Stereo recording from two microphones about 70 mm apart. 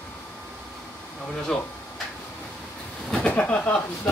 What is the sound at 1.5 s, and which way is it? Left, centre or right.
Speech, centre.